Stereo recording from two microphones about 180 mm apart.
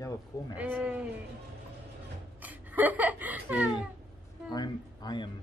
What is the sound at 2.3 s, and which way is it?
Speech, 10° right (ahead or behind).